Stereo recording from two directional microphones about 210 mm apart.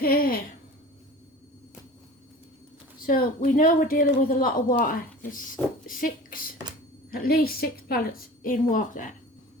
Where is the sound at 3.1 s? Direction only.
40° left (ahead or behind).